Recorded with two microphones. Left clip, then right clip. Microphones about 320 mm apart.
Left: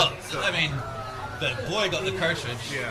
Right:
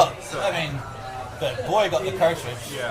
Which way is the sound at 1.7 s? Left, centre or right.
Right.